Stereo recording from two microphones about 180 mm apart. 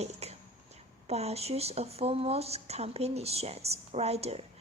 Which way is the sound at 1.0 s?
35° right (ahead or behind).